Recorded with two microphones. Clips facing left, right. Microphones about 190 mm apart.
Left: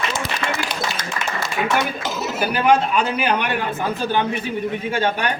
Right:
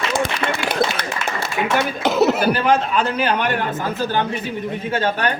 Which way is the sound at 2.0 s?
65° right (ahead or behind).